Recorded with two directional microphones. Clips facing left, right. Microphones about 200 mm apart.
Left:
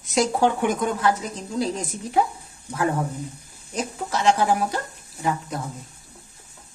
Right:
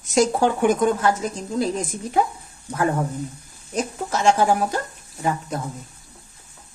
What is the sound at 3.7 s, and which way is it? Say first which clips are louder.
A woman's voice: right 2 dB; 45° right (ahead or behind).